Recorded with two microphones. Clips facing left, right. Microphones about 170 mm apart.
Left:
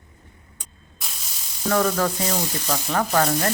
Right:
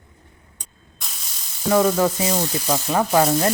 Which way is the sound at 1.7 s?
15° right (ahead or behind).